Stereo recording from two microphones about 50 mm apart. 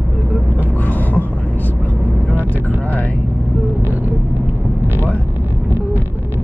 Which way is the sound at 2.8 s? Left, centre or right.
Left.